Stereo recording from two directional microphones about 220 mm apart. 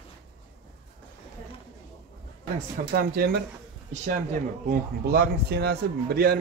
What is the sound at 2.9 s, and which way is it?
Speech, 45° right (ahead or behind).